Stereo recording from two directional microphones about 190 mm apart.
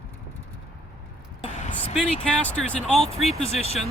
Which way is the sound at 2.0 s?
5° left (ahead or behind).